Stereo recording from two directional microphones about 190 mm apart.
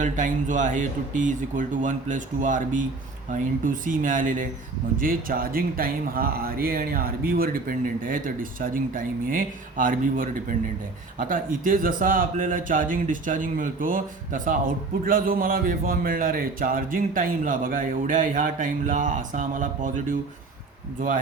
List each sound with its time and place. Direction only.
0.0 s a man's voice: 40° right (ahead or behind)